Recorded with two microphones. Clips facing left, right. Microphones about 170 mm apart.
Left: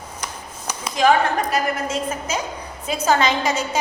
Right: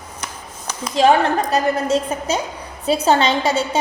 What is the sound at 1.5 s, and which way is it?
A woman's voice, 35° right (ahead or behind).